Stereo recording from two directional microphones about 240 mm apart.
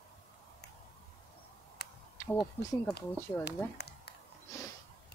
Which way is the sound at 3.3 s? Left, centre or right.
Centre.